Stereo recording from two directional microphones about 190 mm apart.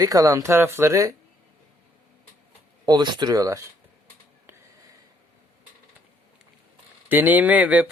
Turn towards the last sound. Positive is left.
turn(degrees=-5)  # may be behind; listen again after turning